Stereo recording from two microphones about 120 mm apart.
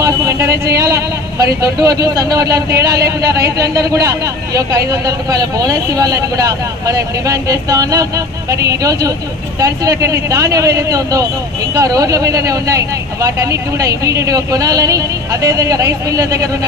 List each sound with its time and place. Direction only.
0.0 s speech: 25° right (ahead or behind)